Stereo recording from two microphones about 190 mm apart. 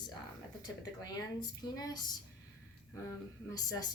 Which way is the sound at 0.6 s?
20° left (ahead or behind).